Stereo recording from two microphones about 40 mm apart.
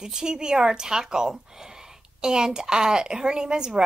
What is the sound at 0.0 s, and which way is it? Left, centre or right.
A woman's voice, centre.